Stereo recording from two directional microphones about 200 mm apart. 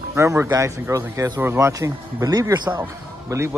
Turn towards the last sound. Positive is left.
turn(degrees=-15)  # may be behind; listen again after turning